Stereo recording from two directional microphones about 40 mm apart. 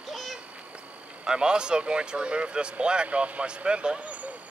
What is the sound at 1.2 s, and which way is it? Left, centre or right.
Speech, right.